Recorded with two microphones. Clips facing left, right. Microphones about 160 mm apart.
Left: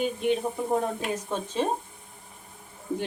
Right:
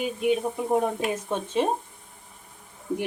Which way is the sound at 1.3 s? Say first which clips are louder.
Right 2 dB; 20° right (ahead or behind).